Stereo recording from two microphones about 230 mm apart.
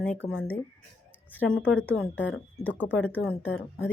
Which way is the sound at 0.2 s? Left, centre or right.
Centre.